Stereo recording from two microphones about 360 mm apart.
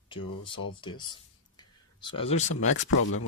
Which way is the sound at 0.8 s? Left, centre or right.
Centre.